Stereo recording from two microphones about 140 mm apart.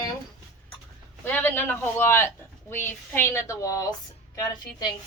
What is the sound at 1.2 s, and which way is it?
A woman's voice, 15° left (ahead or behind).